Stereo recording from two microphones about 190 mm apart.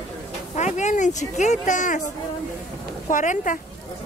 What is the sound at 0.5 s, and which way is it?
Speech, 40° left (ahead or behind).